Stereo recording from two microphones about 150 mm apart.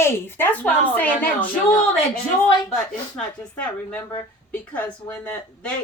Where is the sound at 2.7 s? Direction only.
5° left (ahead or behind).